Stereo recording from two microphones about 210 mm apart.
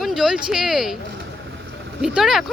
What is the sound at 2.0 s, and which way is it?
Speech, centre (ahead or behind).